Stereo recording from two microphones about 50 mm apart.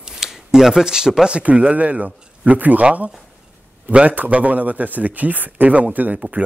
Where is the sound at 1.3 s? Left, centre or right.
Right.